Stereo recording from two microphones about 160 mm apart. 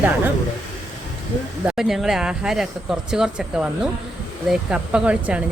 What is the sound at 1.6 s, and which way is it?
Speech, 5° right (ahead or behind).